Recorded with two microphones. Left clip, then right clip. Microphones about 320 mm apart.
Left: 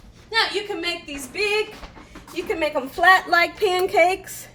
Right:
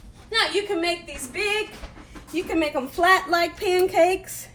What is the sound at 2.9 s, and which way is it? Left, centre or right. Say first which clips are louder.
Speech: left 3 dB; left.